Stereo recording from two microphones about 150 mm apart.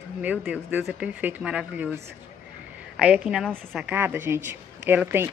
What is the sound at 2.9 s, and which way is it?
Speech, 5° right (ahead or behind).